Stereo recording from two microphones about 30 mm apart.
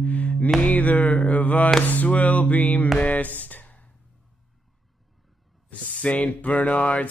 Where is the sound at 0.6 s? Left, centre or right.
Left.